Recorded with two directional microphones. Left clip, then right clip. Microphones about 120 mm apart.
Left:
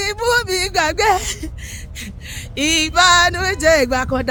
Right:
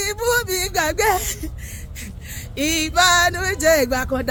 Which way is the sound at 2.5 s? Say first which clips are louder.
Left 4 dB; 25° left (ahead or behind).